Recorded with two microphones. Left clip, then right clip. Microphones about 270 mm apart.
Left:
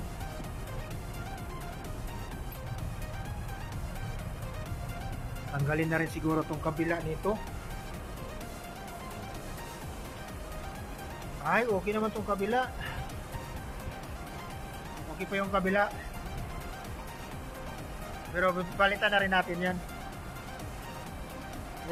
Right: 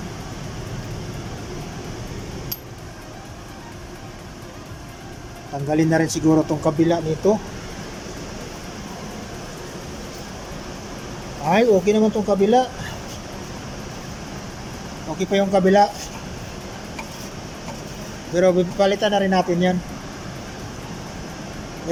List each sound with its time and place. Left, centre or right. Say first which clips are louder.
5.7 s speech: right 12 dB; centre
11.4 s speech: right 12 dB; centre
15.2 s speech: right 13 dB; right
18.3 s speech: right 11 dB; centre